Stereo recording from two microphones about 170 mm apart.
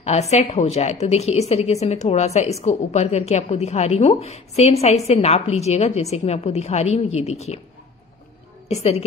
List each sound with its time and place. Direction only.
0.0 s a woman's voice: 40° left (ahead or behind)
8.6 s a woman's voice: 40° left (ahead or behind)